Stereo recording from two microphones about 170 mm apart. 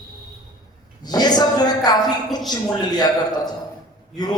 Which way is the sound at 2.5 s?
25° left (ahead or behind).